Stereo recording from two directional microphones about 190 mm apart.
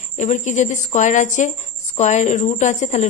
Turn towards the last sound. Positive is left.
turn(degrees=40)  # may be behind; listen again after turning